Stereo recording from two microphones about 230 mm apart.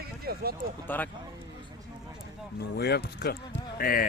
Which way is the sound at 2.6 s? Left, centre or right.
Left.